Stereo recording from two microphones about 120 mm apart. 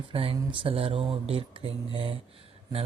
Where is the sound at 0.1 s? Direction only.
50° right (ahead or behind).